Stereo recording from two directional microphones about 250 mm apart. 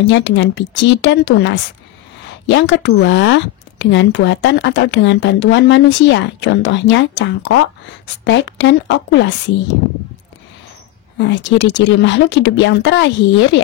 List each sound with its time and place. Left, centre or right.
0.0 s speech: left
11.1 s speech: left